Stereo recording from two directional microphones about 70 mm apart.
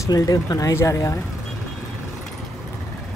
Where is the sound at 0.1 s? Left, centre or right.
Left.